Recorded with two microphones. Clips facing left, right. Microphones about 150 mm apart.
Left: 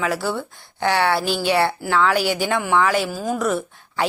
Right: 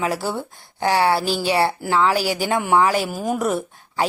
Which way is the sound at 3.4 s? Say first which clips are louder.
Even; 40° right (ahead or behind).